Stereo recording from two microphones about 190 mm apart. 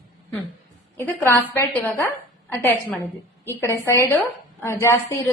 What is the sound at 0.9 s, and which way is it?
A woman's voice, 10° left (ahead or behind).